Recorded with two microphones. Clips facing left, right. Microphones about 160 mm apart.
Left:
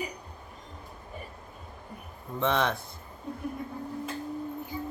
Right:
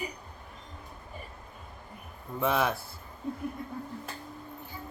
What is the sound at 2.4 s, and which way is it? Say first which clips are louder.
Speech: left 1 dB; 5° right (ahead or behind).